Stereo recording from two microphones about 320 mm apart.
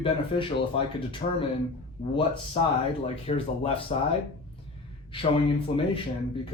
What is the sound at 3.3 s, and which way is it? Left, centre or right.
Speech, centre.